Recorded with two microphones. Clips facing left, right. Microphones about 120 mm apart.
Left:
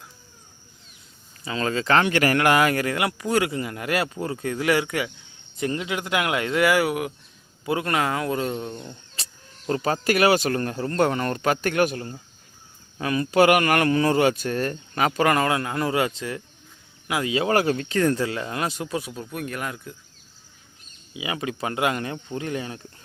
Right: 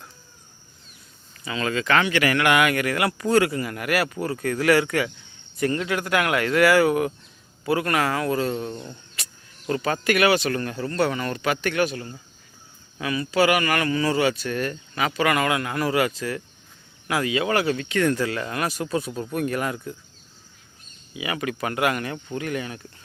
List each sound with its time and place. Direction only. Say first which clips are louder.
1.5 s speech: left 1 dB; 30° left (ahead or behind)
2.0 s speech: left 2 dB; 45° left (ahead or behind)
2.9 s speech: right 3 dB; 15° left (ahead or behind)
7.6 s speech: right 1 dB; 20° left (ahead or behind)
9.1 s speech: even; 30° left (ahead or behind)
17.3 s speech: left 3 dB; 40° left (ahead or behind); by 19.2 s 10° left (ahead or behind)
19.2 s speech: right 5 dB; centre (ahead or behind)
21.1 s speech: right 1 dB; 20° left (ahead or behind)